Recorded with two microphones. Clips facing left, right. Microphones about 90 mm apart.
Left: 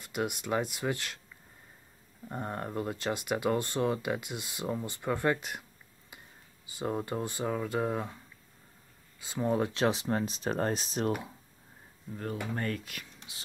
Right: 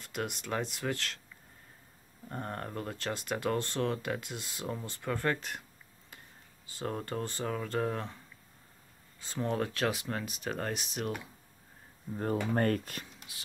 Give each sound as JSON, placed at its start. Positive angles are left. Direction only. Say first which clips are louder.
{"t": 0.0, "sound": "speech", "louder": "left 4 dB", "side_deg": 15}
{"t": 2.2, "sound": "speech", "louder": "left 2 dB", "side_deg": 15}
{"t": 9.2, "sound": "speech", "louder": "left 3 dB", "side_deg": 10}
{"t": 12.5, "sound": "speech", "louder": "right 5 dB", "side_deg": -50}